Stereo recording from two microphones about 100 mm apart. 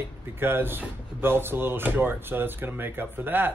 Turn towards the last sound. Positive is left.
turn(degrees=-20)  # may be behind; listen again after turning